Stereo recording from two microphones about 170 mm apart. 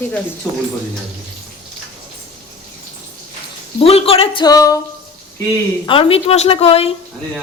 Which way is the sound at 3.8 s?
35° left (ahead or behind).